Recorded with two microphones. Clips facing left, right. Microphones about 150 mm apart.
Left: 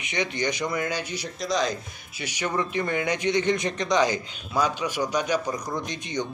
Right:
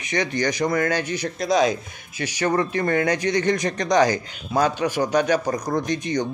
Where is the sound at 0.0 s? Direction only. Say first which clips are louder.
Right 4 dB; 40° right (ahead or behind); by 1.8 s 55° right (ahead or behind).